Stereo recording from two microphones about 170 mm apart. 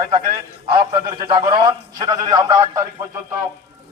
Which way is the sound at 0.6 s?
25° right (ahead or behind).